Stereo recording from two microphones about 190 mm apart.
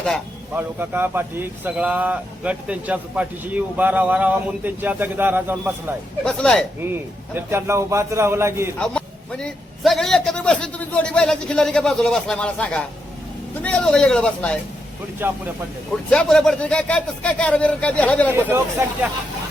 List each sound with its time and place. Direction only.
0.5 s speech: 10° right (ahead or behind)
6.2 s a man's voice: 5° left (ahead or behind)
6.7 s speech: 10° right (ahead or behind)
8.8 s a man's voice: 5° left (ahead or behind)
15.2 s speech: 10° right (ahead or behind)
16.0 s speech: 5° left (ahead or behind)
18.3 s speech: 10° right (ahead or behind)